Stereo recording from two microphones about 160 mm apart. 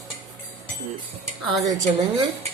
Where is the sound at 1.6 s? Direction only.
25° right (ahead or behind).